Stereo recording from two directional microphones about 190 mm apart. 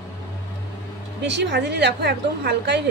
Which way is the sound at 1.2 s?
65° right (ahead or behind).